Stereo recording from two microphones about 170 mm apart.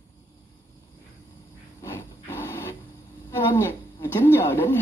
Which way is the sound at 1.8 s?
15° left (ahead or behind).